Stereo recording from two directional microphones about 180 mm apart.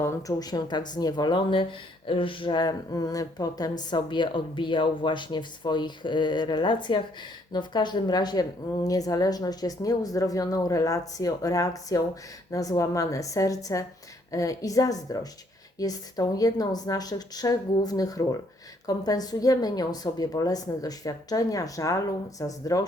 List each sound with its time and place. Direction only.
0.0 s speech: 15° left (ahead or behind)